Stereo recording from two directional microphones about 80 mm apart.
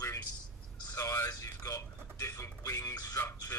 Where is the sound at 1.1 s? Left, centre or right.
Left.